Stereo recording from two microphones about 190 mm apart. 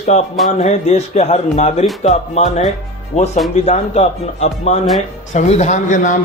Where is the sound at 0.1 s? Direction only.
35° left (ahead or behind).